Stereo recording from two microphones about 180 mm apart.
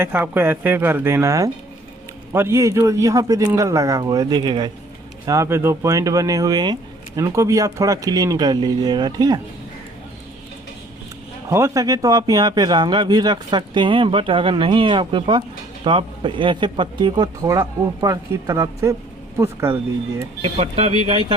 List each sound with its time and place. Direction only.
0.0 s a man's voice: 10° right (ahead or behind)
11.4 s speech: 15° right (ahead or behind)